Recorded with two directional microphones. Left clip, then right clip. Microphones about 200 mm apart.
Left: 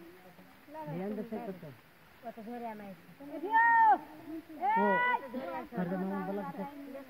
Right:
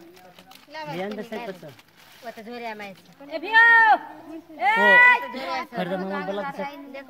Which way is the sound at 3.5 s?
50° right (ahead or behind).